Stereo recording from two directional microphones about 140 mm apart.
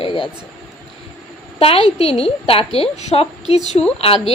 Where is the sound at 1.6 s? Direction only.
40° left (ahead or behind).